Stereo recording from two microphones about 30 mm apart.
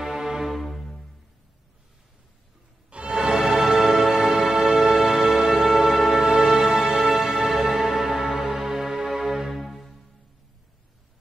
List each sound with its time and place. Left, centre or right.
0.0 s music: centre
0.5 s music: centre
2.9 s music: right
3.2 s music: centre
9.5 s music: centre